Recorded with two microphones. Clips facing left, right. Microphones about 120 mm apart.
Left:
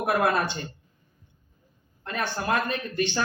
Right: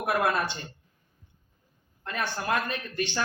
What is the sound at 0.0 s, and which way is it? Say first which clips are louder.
Speech: left 3 dB; 30° left (ahead or behind).